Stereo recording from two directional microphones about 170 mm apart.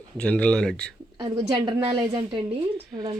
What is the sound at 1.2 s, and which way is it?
A woman's voice, 25° right (ahead or behind).